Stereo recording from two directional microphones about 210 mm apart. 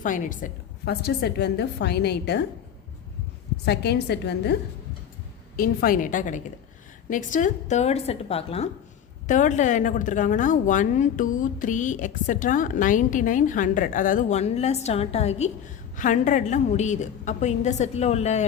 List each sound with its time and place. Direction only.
0.0 s a woman's voice: 40° left (ahead or behind)
3.7 s a woman's voice: 50° left (ahead or behind)
5.5 s a woman's voice: 40° left (ahead or behind)